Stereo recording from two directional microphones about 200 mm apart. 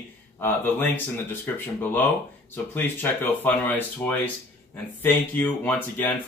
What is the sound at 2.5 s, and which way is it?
Speech, 10° left (ahead or behind).